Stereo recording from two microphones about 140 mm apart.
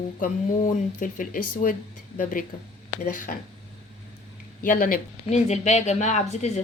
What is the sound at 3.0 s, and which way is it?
Speech, 70° left (ahead or behind).